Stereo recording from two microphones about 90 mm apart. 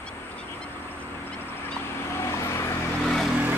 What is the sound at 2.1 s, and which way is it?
Vehicle, 30° left (ahead or behind).